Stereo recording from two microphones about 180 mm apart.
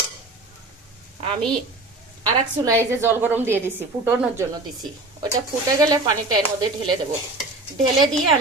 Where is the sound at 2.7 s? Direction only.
15° right (ahead or behind).